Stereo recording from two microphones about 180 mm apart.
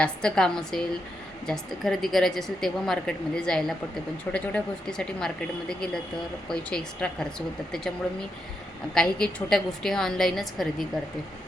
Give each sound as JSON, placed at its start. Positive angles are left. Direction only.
{"t": 0.0, "sound": "a woman's voice", "side_deg": 5}
{"t": 9.0, "sound": "a woman's voice", "side_deg": 5}